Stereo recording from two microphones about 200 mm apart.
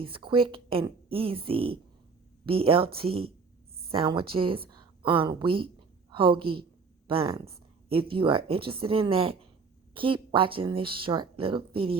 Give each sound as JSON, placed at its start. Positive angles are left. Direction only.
{"t": 0.0, "sound": "a woman's voice", "side_deg": -25}